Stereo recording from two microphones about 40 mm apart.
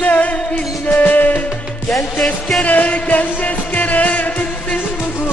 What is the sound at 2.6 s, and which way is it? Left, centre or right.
Music, left.